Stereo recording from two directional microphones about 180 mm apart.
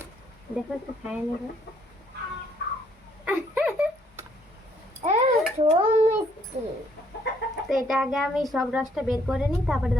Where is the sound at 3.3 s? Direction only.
10° right (ahead or behind).